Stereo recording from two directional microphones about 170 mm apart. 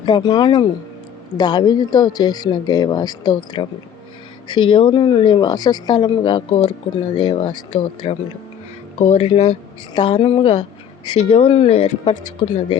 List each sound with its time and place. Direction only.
0.0 s speech: 25° left (ahead or behind)